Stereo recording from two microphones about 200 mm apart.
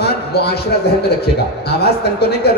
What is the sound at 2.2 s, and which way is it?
Speech, 55° left (ahead or behind).